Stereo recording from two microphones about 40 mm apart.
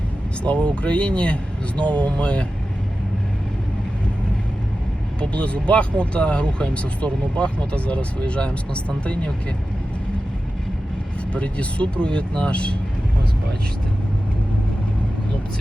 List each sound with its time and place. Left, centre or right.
0.4 s speech: left
5.2 s speech: left
11.3 s speech: left